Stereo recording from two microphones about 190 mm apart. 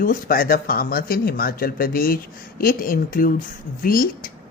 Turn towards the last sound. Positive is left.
turn(degrees=50)  # may be behind; listen again after turning